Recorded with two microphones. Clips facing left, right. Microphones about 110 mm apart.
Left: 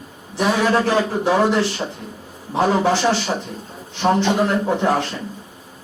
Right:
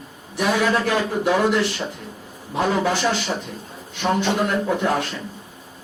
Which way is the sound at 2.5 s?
30° left (ahead or behind).